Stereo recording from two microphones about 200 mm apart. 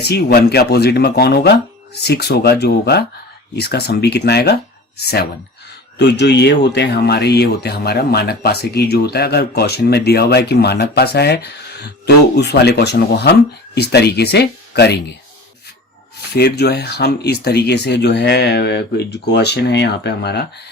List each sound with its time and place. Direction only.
0.0 s speech: 55° left (ahead or behind)
16.3 s speech: 55° left (ahead or behind)